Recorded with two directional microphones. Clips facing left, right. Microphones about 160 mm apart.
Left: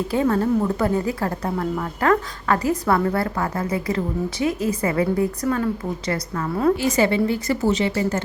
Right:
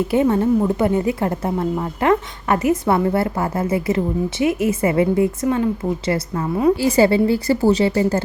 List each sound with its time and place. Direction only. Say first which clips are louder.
0.1 s a woman's voice: right 3 dB; 20° right (ahead or behind)